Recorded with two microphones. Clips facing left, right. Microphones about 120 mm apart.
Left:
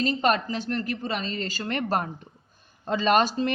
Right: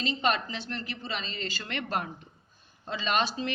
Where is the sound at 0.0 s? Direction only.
45° left (ahead or behind).